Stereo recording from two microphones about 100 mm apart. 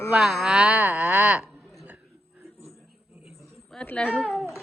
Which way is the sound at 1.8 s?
20° right (ahead or behind).